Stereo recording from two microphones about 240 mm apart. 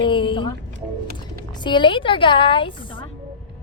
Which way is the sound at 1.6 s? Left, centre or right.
Centre.